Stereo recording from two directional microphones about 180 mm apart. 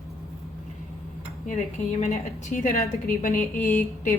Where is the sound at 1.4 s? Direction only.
40° left (ahead or behind).